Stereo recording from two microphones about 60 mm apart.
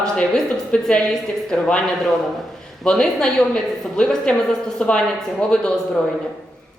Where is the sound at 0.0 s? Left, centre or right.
Centre.